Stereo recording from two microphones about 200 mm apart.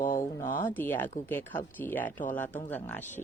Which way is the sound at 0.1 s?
40° left (ahead or behind).